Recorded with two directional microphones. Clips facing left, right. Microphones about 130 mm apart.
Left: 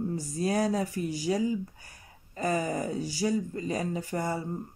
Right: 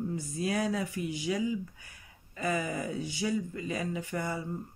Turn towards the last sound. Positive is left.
turn(degrees=40)  # may be behind; listen again after turning